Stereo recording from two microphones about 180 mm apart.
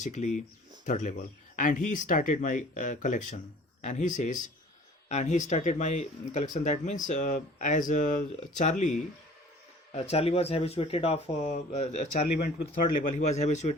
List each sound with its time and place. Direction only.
0.0 s speech: 40° left (ahead or behind)